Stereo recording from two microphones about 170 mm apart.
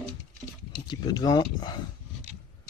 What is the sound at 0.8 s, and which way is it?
Speech, 25° left (ahead or behind).